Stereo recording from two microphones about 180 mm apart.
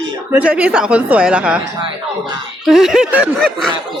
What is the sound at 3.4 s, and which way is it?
Speech, 5° left (ahead or behind).